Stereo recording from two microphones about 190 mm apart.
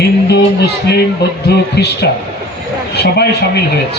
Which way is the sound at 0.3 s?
60° left (ahead or behind).